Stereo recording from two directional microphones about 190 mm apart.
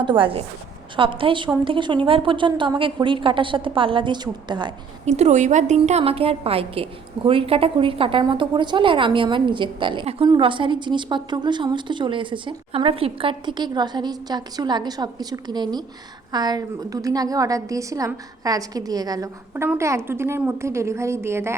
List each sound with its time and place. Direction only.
0.0 s a woman's voice: 25° right (ahead or behind)
5.0 s a woman's voice: 35° right (ahead or behind); by 21.5 s 15° right (ahead or behind)